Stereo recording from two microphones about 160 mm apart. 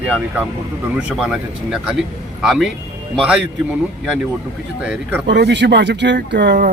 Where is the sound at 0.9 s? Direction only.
5° right (ahead or behind).